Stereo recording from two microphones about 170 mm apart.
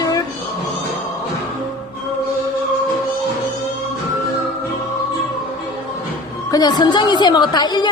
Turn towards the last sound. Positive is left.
turn(degrees=25)  # may be behind; listen again after turning